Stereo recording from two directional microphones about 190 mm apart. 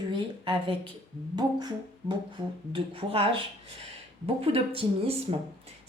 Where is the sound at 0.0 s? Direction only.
25° right (ahead or behind).